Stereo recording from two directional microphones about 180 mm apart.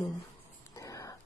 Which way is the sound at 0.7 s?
20° left (ahead or behind).